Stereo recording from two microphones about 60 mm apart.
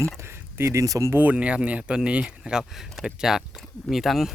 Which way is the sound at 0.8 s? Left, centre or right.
Right.